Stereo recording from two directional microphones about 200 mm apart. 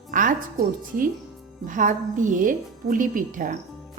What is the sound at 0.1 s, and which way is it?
Music, 45° right (ahead or behind).